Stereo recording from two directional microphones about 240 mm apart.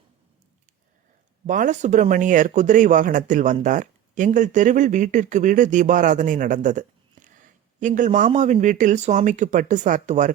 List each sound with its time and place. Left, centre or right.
1.5 s speech: right